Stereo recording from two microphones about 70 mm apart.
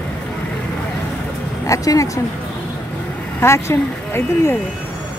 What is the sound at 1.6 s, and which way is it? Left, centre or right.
Speech, left.